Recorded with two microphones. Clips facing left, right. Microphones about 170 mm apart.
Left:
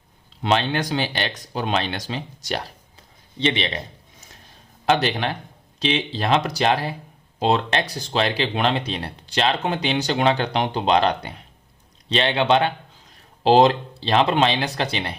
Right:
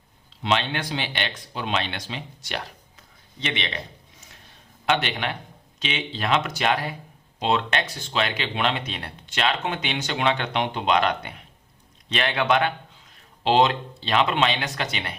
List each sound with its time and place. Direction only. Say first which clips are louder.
0.4 s speech: left 4 dB; 40° left (ahead or behind)
4.9 s a man's voice: left 4 dB; 35° left (ahead or behind)